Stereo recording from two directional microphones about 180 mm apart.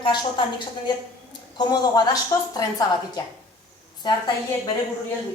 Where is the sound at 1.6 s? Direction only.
25° left (ahead or behind).